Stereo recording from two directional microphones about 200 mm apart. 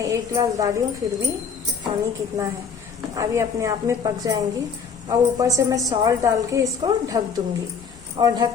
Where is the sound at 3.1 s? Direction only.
15° right (ahead or behind).